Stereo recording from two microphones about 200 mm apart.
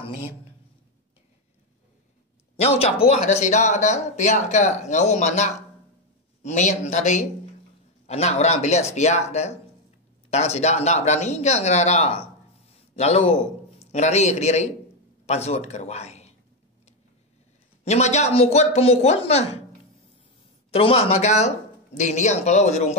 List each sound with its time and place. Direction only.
2.5 s speech: 30° left (ahead or behind)
12.6 s a sound: 30° left (ahead or behind)
13.7 s a man's voice: 35° left (ahead or behind)
17.8 s speech: 35° left (ahead or behind)
20.7 s speech: 30° left (ahead or behind)